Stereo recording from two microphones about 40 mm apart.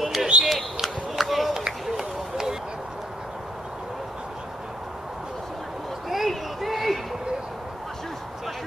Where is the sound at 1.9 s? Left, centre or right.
Centre.